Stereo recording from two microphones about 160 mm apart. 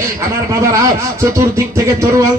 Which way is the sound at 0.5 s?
20° right (ahead or behind).